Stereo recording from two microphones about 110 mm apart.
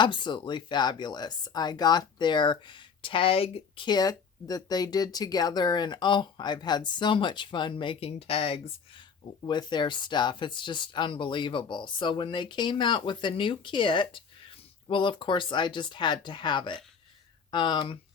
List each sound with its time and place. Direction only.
0.0 s speech: 45° left (ahead or behind); by 3.8 s 60° left (ahead or behind)
3.8 s speech: 35° left (ahead or behind); by 8.6 s 60° left (ahead or behind)
9.4 s speech: 40° left (ahead or behind)